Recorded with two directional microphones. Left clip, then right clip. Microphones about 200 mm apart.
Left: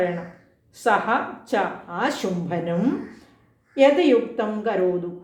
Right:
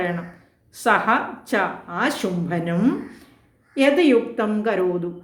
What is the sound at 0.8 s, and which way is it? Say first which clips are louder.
A woman's voice: right 2 dB; 15° right (ahead or behind).